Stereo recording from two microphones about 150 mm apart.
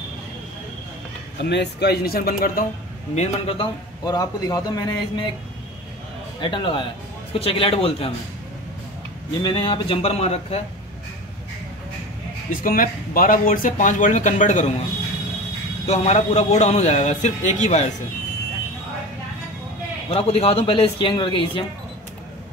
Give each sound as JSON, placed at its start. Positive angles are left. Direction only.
{"t": 1.4, "sound": "speech", "side_deg": 90}
{"t": 3.2, "sound": "speech", "side_deg": 40}
{"t": 4.0, "sound": "a man's voice", "side_deg": 25}
{"t": 6.4, "sound": "speech", "side_deg": 35}
{"t": 9.4, "sound": "speech", "side_deg": 30}
{"t": 12.6, "sound": "speech", "side_deg": 65}
{"t": 15.9, "sound": "a man's voice", "side_deg": 50}
{"t": 20.1, "sound": "speech", "side_deg": 40}